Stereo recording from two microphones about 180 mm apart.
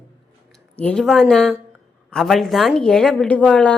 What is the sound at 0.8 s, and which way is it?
A woman's voice, 5° left (ahead or behind).